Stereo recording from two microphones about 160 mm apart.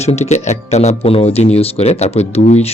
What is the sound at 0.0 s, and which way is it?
Speech, 40° left (ahead or behind).